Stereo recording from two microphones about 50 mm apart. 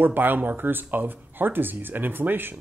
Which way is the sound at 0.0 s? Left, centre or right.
Right.